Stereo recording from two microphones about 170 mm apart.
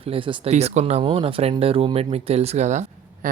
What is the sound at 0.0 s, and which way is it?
Speech, 30° right (ahead or behind).